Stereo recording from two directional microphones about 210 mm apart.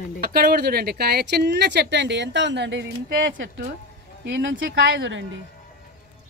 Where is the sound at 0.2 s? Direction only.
45° right (ahead or behind).